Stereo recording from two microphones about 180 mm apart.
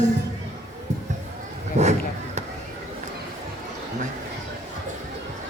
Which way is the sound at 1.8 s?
40° right (ahead or behind).